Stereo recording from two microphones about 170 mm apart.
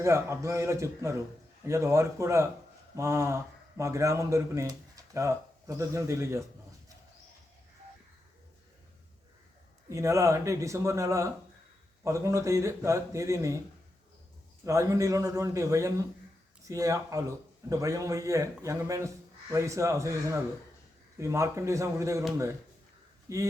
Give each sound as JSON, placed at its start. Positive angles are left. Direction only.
{"t": 0.0, "sound": "speech", "side_deg": -15}
{"t": 9.9, "sound": "speech", "side_deg": -20}
{"t": 14.6, "sound": "a man's voice", "side_deg": -20}
{"t": 23.3, "sound": "a man's voice", "side_deg": -20}